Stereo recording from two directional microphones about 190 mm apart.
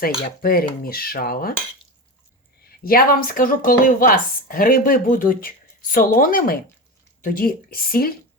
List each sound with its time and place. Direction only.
0.4 s a woman's voice: 50° left (ahead or behind)
2.6 s a woman's voice: 50° left (ahead or behind)